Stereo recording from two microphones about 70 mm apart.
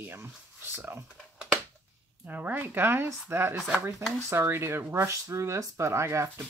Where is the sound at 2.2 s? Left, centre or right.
Right.